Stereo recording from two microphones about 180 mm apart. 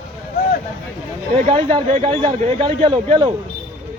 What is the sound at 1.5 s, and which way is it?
A man's voice, 35° right (ahead or behind).